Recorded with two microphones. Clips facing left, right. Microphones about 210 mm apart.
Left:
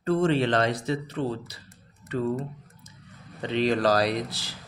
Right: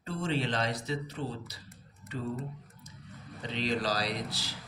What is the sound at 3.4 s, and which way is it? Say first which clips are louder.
Speech: left 9 dB; 65° left (ahead or behind).